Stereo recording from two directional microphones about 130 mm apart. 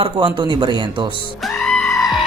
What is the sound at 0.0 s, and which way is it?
Speech, 40° right (ahead or behind).